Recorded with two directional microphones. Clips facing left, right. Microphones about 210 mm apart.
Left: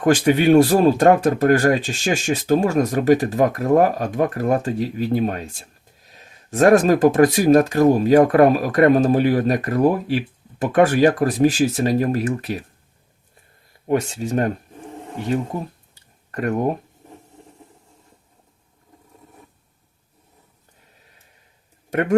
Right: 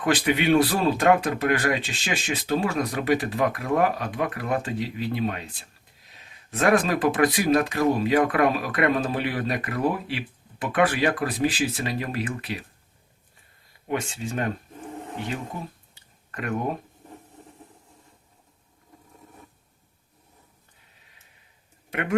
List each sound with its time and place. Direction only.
0.0 s speech: 45° left (ahead or behind)
13.8 s speech: 40° left (ahead or behind)
16.3 s speech: 40° left (ahead or behind)
21.8 s a sound: 45° left (ahead or behind)